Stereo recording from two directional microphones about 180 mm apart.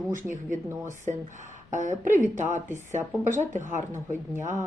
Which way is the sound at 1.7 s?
45° right (ahead or behind).